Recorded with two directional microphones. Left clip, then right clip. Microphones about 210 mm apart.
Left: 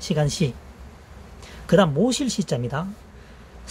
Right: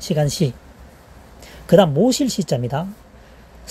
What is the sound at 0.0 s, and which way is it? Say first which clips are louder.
A woman's voice: right 4 dB; 15° right (ahead or behind).